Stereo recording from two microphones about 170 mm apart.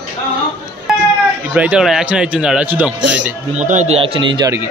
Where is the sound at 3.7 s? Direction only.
40° right (ahead or behind).